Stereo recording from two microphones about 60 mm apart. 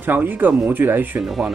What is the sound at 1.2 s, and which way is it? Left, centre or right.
Speech, centre.